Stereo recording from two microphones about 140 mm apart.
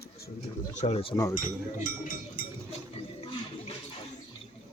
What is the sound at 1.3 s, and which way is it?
Speech, 70° left (ahead or behind).